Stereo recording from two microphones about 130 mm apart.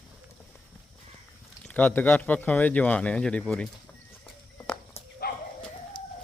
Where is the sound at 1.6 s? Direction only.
15° left (ahead or behind).